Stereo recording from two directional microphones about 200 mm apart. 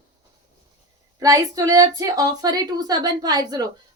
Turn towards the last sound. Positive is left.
turn(degrees=-20)  # may be behind; listen again after turning